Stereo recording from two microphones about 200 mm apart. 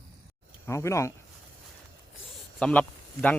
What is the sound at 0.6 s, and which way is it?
Speech, 15° left (ahead or behind).